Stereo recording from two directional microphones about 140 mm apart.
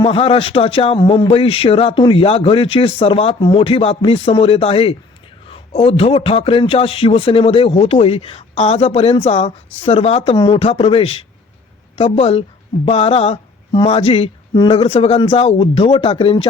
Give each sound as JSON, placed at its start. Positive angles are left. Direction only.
{"t": 0.0, "sound": "a man's voice", "side_deg": 45}